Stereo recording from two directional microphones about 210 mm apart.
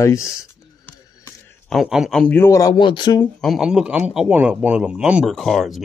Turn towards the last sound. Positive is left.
turn(degrees=0)  # may be behind; listen again after turning